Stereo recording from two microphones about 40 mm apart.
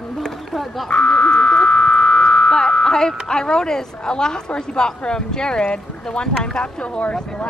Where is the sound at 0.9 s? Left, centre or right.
Left.